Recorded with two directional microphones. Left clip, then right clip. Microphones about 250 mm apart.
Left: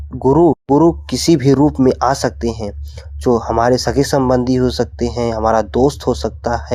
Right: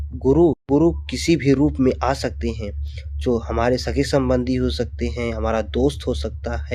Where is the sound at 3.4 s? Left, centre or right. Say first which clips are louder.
Left 8 dB; centre.